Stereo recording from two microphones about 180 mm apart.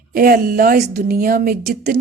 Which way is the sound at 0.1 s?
55° right (ahead or behind).